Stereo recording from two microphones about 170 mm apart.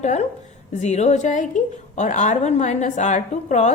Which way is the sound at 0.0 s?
45° left (ahead or behind).